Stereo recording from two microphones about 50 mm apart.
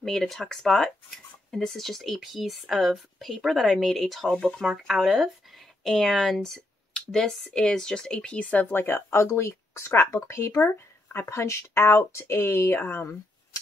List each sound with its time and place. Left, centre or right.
0.0 s speech: centre; by 8.6 s left
8.6 s speech: left
9.1 s speech: left